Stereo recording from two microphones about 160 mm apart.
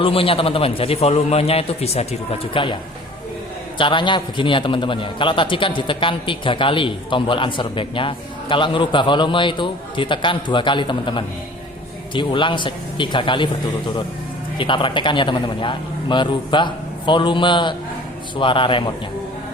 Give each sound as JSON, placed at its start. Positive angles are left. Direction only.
{"t": 0.0, "sound": "a man's voice", "side_deg": 35}
{"t": 3.8, "sound": "a man's voice", "side_deg": 30}
{"t": 14.6, "sound": "a man's voice", "side_deg": 30}